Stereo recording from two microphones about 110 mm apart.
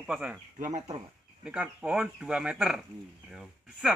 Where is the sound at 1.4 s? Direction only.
10° right (ahead or behind).